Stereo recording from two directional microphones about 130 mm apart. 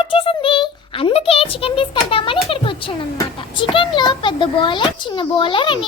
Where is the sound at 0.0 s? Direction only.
40° left (ahead or behind).